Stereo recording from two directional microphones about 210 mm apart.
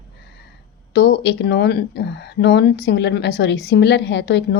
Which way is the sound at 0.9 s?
55° left (ahead or behind).